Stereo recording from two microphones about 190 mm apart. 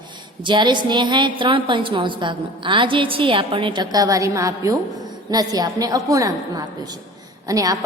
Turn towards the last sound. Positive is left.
turn(degrees=-20)  # may be behind; listen again after turning